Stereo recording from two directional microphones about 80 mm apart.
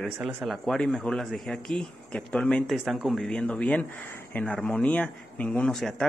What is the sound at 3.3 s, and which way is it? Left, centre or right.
Speech, centre.